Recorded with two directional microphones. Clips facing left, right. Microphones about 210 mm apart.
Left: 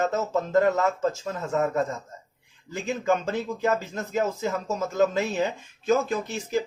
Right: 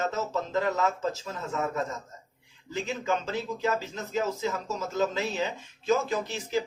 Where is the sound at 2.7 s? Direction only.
50° left (ahead or behind).